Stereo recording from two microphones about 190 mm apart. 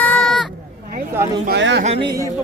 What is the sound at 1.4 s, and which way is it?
Speech, 65° right (ahead or behind).